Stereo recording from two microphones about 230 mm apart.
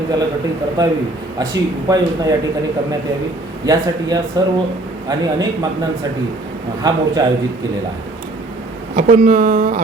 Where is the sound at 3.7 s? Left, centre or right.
Centre.